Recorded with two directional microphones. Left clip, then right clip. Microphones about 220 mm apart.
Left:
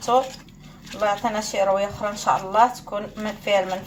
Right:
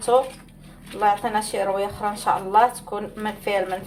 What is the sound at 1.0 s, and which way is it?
Speech, 30° right (ahead or behind).